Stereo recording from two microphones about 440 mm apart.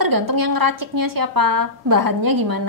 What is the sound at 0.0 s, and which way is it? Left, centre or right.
A woman's voice, right.